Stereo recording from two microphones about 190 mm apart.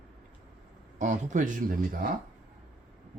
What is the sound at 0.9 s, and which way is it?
Speech, 40° right (ahead or behind).